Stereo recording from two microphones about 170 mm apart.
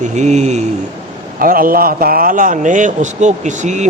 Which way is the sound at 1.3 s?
55° right (ahead or behind).